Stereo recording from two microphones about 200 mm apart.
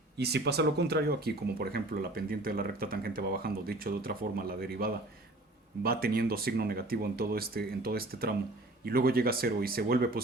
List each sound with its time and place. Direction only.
0.2 s speech: 55° right (ahead or behind)